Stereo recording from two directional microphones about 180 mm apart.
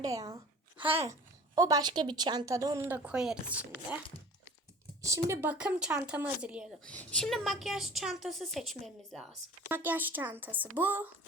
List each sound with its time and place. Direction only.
0.0 s speech: 20° right (ahead or behind)
1.5 s speech: 20° right (ahead or behind)
5.0 s speech: 15° right (ahead or behind)
6.8 s a woman's voice: 5° left (ahead or behind); by 11.1 s 10° right (ahead or behind)